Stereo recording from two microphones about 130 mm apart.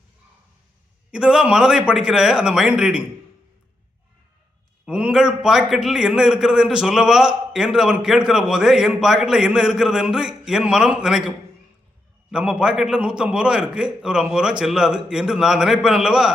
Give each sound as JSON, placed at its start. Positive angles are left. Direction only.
{"t": 1.1, "sound": "a man's voice", "side_deg": -5}
{"t": 4.9, "sound": "a man's voice", "side_deg": -10}